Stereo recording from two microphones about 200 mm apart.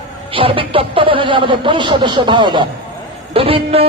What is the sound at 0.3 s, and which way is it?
A woman's voice, 25° right (ahead or behind).